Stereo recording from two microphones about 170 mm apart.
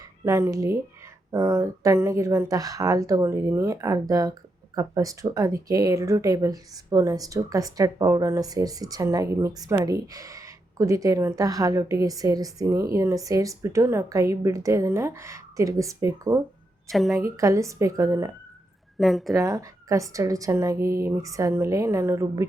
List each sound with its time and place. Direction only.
0.3 s a woman's voice: 15° right (ahead or behind)
16.9 s speech: centre (ahead or behind)
17.3 s speech: 20° right (ahead or behind)
18.9 s speech: centre (ahead or behind)
19.3 s a woman's voice: 20° right (ahead or behind)